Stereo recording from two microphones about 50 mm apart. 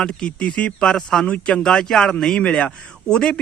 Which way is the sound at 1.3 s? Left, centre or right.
Left.